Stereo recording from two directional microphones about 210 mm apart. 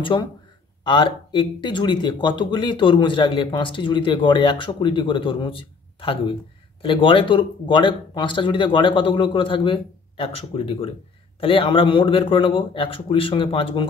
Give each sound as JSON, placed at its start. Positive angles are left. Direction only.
{"t": 0.0, "sound": "speech", "side_deg": 20}